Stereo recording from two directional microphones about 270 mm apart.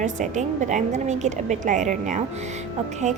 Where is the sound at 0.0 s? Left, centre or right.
Right.